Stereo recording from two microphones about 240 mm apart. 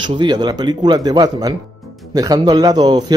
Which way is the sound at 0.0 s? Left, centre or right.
Centre.